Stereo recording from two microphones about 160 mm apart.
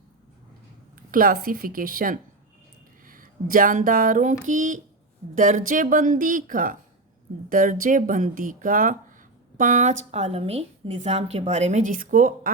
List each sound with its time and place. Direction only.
0.9 s speech: 60° right (ahead or behind)
3.0 s a sound: 60° right (ahead or behind)
5.3 s speech: 55° right (ahead or behind)